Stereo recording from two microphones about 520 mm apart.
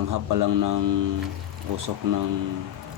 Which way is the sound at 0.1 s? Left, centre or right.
Right.